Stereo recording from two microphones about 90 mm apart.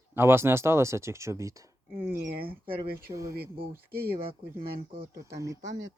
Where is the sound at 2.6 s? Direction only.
90° right.